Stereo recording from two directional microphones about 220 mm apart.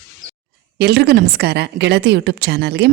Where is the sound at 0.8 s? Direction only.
45° right (ahead or behind).